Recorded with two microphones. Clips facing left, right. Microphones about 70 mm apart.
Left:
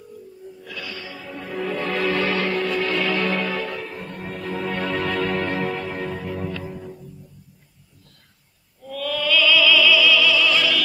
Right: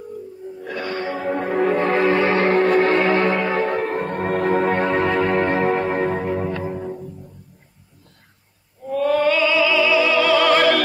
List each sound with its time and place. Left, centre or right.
0.6 s music: right
8.8 s opera: right